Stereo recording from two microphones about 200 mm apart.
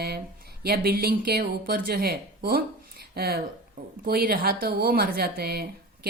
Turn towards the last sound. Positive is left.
turn(degrees=-50)  # may be behind; listen again after turning